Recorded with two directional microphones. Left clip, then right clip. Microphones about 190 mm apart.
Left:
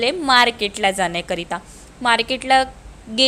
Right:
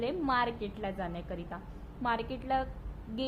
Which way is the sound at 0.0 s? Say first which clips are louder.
Left 16 dB; 40° left (ahead or behind).